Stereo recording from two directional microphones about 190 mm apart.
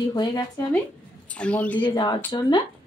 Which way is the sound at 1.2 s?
5° left (ahead or behind).